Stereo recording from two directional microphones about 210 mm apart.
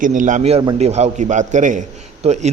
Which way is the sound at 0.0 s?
40° right (ahead or behind).